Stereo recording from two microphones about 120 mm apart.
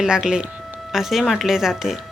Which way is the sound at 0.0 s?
5° right (ahead or behind).